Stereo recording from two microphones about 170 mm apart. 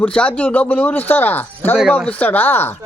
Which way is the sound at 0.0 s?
5° left (ahead or behind).